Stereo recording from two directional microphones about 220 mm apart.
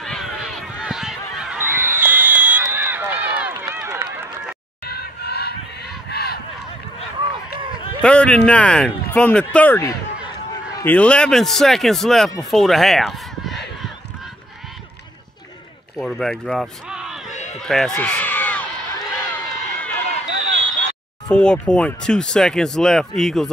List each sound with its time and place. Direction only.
0.0 s honk: centre (ahead or behind)
4.8 s honk: 45° left (ahead or behind)
8.0 s speech: 5° left (ahead or behind)
16.0 s speech: centre (ahead or behind)
17.3 s a sound: 30° left (ahead or behind)
17.6 s a sound: centre (ahead or behind)
21.3 s speech: 5° left (ahead or behind)